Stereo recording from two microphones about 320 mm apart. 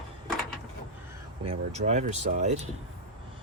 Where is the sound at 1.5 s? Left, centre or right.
Right.